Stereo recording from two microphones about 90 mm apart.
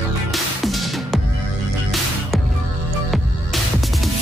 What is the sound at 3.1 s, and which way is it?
Music, centre (ahead or behind).